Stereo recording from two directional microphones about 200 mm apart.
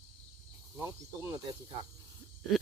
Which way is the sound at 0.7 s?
15° right (ahead or behind).